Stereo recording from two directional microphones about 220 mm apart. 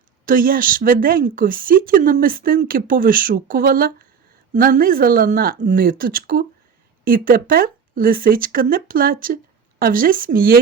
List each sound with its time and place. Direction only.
0.3 s speech: 40° right (ahead or behind)